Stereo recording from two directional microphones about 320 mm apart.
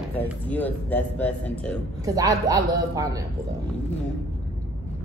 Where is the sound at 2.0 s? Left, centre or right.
Centre.